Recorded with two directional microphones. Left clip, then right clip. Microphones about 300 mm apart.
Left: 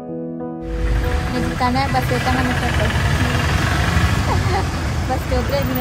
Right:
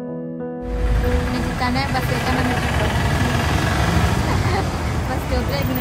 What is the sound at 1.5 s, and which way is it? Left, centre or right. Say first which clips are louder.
Speech: left 4 dB; centre.